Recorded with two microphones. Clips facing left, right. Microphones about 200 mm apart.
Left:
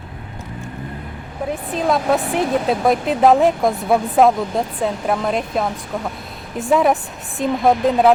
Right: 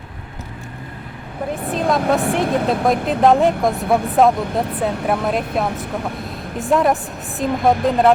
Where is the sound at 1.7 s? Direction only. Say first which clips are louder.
Even; centre (ahead or behind).